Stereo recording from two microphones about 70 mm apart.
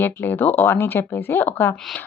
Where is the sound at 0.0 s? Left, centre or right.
Left.